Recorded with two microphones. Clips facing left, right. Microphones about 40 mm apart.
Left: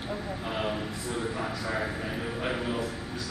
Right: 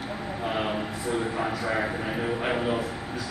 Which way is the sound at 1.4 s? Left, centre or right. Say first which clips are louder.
Right 4 dB; centre.